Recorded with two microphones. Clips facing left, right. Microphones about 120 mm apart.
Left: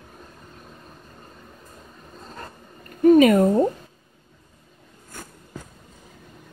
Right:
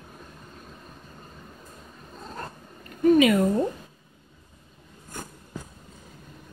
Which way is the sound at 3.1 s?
45° left (ahead or behind).